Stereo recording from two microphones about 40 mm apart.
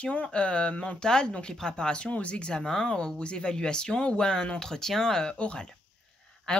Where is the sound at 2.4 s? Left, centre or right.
Centre.